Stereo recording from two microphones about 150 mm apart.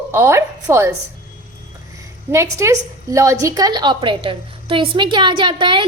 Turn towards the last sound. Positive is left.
turn(degrees=-35)  # may be behind; listen again after turning